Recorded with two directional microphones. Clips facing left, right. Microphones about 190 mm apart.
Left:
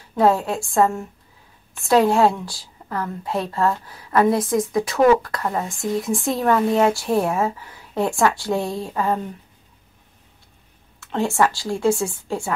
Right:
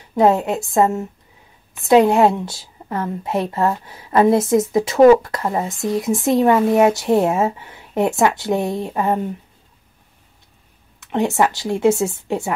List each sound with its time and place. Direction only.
0.1 s a woman's voice: 20° right (ahead or behind)
11.0 s a woman's voice: 20° right (ahead or behind)